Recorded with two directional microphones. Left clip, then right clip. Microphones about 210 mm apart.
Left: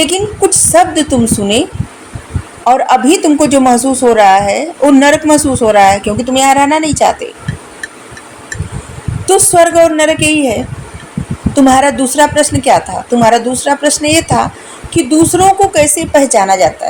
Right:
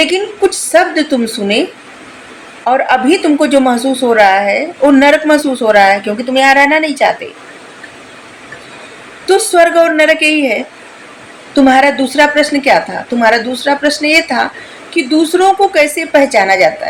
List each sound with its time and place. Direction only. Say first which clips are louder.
0.0 s a woman's voice: even; 35° left (ahead or behind)
2.6 s a woman's voice: left 2 dB; 35° left (ahead or behind)
9.2 s a woman's voice: left 1 dB; 35° left (ahead or behind)
11.7 s a woman's voice: right 1 dB; 35° left (ahead or behind)